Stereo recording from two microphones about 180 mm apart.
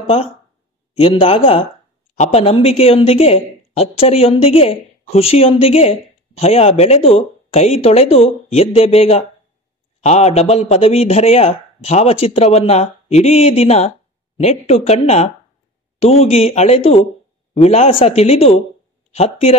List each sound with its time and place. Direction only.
0.0 s a woman's voice: 35° left (ahead or behind)